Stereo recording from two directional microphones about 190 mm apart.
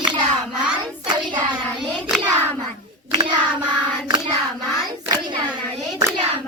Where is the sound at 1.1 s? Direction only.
25° right (ahead or behind).